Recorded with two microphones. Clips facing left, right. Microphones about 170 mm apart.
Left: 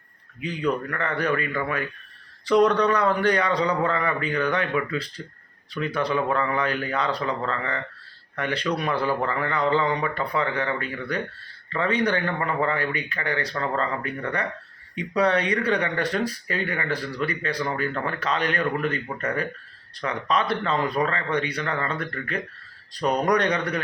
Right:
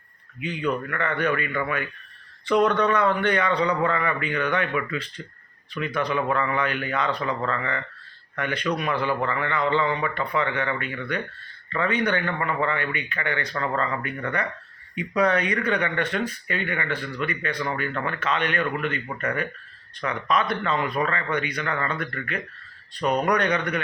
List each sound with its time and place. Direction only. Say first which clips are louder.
0.9 s a man's voice: even; 35° left (ahead or behind)